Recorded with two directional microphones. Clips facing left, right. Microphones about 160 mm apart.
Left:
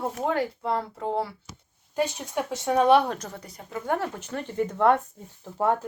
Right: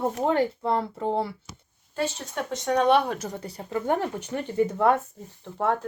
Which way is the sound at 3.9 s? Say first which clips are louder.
Right 2 dB; 15° right (ahead or behind).